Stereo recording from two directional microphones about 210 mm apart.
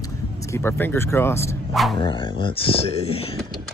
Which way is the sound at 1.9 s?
25° left (ahead or behind).